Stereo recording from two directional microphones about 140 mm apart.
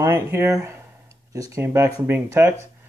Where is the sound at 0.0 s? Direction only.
20° right (ahead or behind).